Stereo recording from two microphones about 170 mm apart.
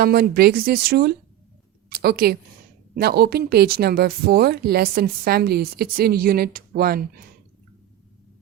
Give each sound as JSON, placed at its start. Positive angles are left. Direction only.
{"t": 0.0, "sound": "a woman's voice", "side_deg": -65}